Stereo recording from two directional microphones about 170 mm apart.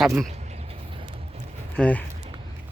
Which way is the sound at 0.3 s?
40° right (ahead or behind).